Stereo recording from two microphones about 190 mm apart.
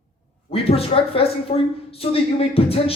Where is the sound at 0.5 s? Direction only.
30° left (ahead or behind).